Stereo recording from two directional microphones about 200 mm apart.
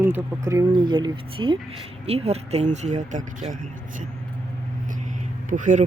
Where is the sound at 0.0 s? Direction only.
10° right (ahead or behind); by 4.1 s 40° right (ahead or behind).